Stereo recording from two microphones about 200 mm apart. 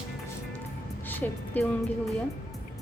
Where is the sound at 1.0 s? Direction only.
10° left (ahead or behind).